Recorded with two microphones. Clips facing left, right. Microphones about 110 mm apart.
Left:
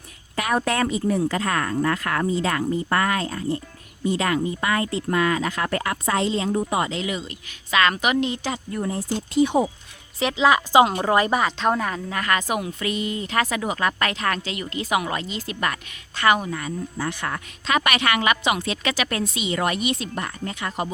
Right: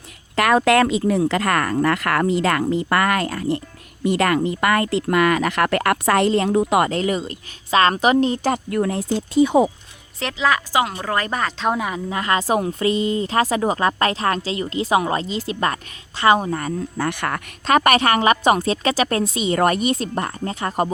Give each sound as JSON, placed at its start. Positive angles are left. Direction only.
{"t": 0.3, "sound": "speech", "side_deg": -85}
{"t": 8.4, "sound": "speech", "side_deg": -75}
{"t": 10.3, "sound": "speech", "side_deg": 20}
{"t": 11.5, "sound": "speech", "side_deg": -5}
{"t": 17.0, "sound": "speech", "side_deg": -70}
{"t": 17.7, "sound": "speech", "side_deg": -45}